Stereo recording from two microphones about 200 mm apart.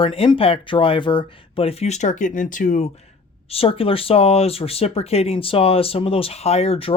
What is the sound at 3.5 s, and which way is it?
Speech, 30° left (ahead or behind).